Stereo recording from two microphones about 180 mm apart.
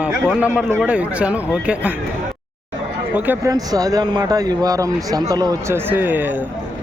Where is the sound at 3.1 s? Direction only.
10° right (ahead or behind).